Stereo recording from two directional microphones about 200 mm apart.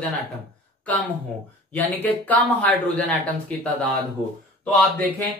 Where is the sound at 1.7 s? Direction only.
10° left (ahead or behind).